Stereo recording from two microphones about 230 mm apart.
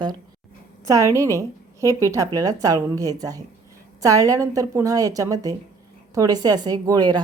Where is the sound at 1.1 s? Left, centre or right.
Centre.